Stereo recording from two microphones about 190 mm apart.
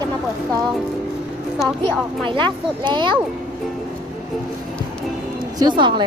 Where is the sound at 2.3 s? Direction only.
25° right (ahead or behind).